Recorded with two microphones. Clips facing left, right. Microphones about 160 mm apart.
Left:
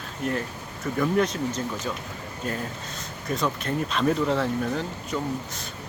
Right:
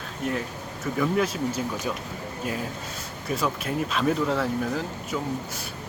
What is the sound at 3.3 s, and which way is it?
Speech, 5° right (ahead or behind).